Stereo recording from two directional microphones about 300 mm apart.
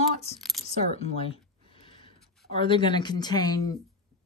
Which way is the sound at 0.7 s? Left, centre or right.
Left.